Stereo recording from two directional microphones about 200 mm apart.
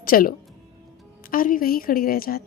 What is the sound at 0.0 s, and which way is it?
A woman's voice, 45° left (ahead or behind).